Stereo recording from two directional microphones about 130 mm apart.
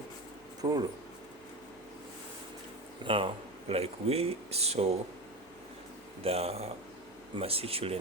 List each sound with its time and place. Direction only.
0.6 s speech: 30° right (ahead or behind)
3.0 s speech: 40° right (ahead or behind)
6.2 s speech: 50° right (ahead or behind)